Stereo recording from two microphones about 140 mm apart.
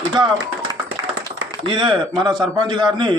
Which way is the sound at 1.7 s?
35° right (ahead or behind).